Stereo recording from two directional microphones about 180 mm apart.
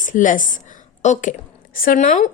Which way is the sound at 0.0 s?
45° left (ahead or behind).